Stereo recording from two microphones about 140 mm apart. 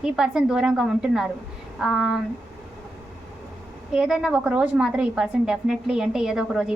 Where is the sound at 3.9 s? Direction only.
5° right (ahead or behind).